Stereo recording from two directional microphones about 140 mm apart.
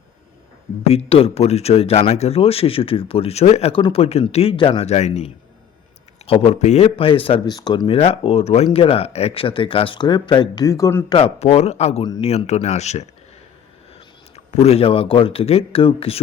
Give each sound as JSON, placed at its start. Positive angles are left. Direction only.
{"t": 0.9, "sound": "speech", "side_deg": 45}
{"t": 11.1, "sound": "speech", "side_deg": 45}
{"t": 14.3, "sound": "speech", "side_deg": 50}